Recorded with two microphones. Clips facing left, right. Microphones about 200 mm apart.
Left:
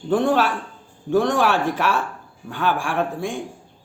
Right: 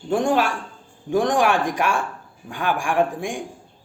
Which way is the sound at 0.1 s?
15° right (ahead or behind).